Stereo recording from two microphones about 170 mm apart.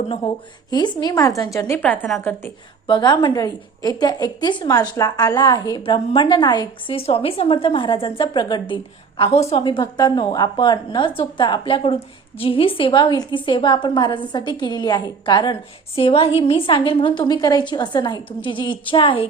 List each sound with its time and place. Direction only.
0.7 s a woman's voice: 25° left (ahead or behind); by 2.3 s 5° left (ahead or behind)
2.8 s a woman's voice: 25° left (ahead or behind)